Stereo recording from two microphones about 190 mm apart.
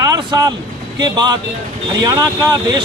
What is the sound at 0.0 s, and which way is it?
Vehicle, 20° right (ahead or behind).